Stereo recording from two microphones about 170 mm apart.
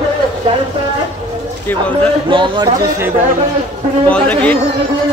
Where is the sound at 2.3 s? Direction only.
30° right (ahead or behind).